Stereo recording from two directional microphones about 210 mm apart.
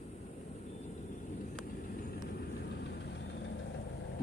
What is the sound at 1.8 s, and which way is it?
Vehicle, 50° left (ahead or behind).